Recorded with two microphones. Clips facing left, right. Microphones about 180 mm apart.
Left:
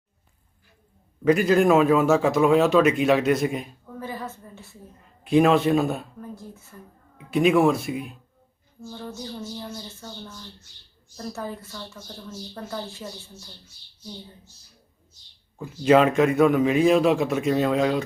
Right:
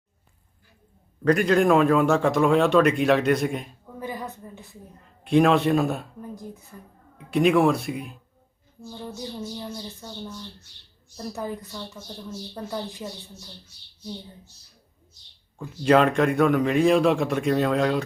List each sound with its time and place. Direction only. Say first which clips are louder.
1.2 s a man's voice: left 1 dB; 5° left (ahead or behind)
4.0 s a sound: right 1 dB; 15° right (ahead or behind)
5.2 s a man's voice: left 1 dB; centre (ahead or behind)
6.3 s a woman's voice: right 2 dB; 15° right (ahead or behind)
7.3 s a man's voice: even; centre (ahead or behind)
8.9 s a woman's voice: even; 15° right (ahead or behind)
15.5 s a man's voice: left 1 dB; 5° left (ahead or behind)